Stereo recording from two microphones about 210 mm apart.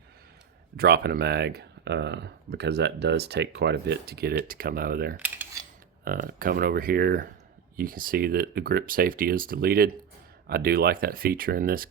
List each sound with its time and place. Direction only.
0.8 s speech: 50° right (ahead or behind)